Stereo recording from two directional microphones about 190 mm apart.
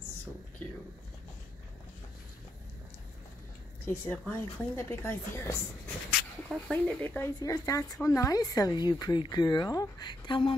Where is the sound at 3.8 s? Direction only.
10° left (ahead or behind).